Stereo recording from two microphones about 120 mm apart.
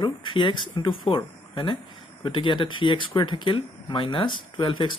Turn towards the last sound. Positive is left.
turn(degrees=40)  # may be behind; listen again after turning